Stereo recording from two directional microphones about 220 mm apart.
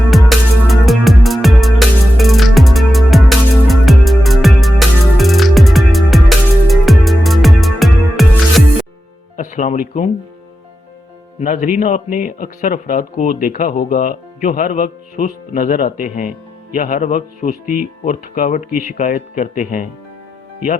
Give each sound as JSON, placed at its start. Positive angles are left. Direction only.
{"t": 0.1, "sound": "music", "side_deg": 0}
{"t": 9.3, "sound": "music", "side_deg": 35}
{"t": 11.3, "sound": "a man's voice", "side_deg": 35}